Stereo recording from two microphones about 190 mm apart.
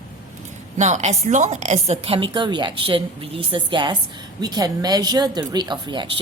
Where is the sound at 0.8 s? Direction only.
35° right (ahead or behind).